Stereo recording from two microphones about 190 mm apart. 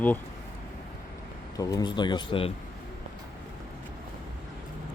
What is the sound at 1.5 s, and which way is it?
Speech, 20° left (ahead or behind).